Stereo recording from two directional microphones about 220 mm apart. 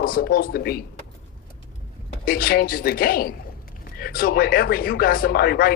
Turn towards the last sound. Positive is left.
turn(degrees=45)  # may be behind; listen again after turning